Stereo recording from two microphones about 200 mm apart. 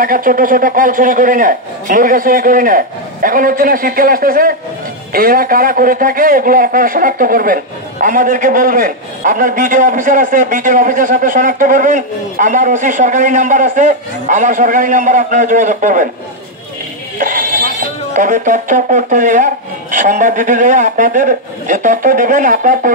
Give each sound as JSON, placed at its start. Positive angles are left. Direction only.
{"t": 0.0, "sound": "a man's voice", "side_deg": -45}
{"t": 17.2, "sound": "a sound", "side_deg": -40}
{"t": 18.1, "sound": "a man's voice", "side_deg": -40}